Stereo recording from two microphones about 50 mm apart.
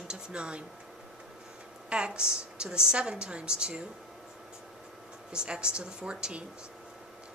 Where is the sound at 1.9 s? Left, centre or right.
Right.